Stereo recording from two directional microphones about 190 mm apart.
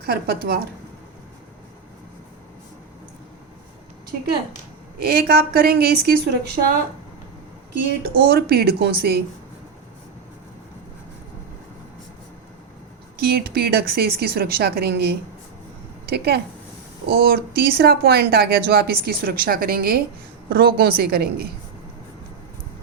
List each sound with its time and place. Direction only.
0.0 s a woman's voice: 55° right (ahead or behind)
4.9 s a woman's voice: 55° right (ahead or behind)
8.0 s speech: 55° right (ahead or behind)
13.1 s speech: 55° right (ahead or behind)